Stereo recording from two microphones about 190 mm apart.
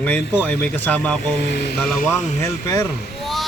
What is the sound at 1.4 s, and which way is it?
Speech, 60° left (ahead or behind).